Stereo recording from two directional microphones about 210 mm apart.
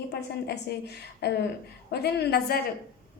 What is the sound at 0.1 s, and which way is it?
A woman's voice, 50° left (ahead or behind).